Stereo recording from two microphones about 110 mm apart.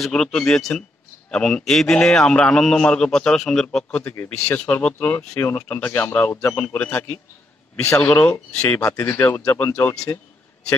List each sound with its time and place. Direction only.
0.0 s a man's voice: 5° left (ahead or behind)
10.1 s speech: 30° left (ahead or behind)